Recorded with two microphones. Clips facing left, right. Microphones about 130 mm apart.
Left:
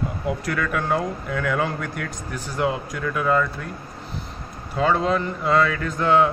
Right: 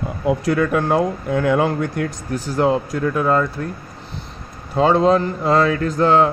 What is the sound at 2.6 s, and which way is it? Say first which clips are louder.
Speech: right 6 dB; 35° right (ahead or behind).